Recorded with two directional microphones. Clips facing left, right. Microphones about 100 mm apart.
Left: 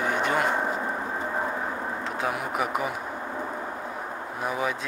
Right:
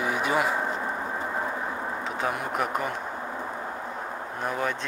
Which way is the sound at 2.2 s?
Centre (ahead or behind).